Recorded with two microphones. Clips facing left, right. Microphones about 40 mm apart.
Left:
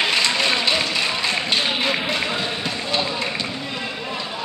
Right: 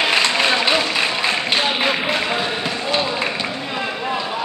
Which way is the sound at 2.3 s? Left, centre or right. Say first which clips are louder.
Right 3 dB; centre.